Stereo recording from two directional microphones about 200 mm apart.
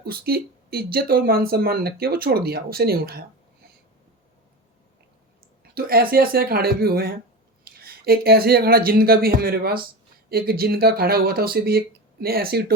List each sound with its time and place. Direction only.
0.0 s speech: 50° right (ahead or behind)
5.7 s speech: 50° right (ahead or behind)